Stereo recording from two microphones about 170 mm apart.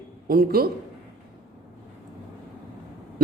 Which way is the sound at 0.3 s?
60° right (ahead or behind).